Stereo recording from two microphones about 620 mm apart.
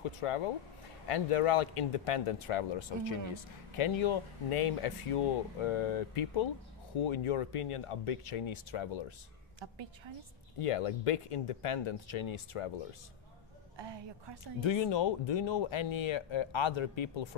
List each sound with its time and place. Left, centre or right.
1.0 s speech: left
10.6 s speech: left
13.7 s a woman's voice: right
14.6 s speech: left